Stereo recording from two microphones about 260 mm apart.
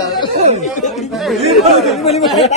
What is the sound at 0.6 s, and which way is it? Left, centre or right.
Speech, left.